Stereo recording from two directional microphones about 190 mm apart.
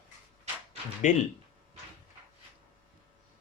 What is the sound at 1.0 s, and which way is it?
Speech, 40° left (ahead or behind).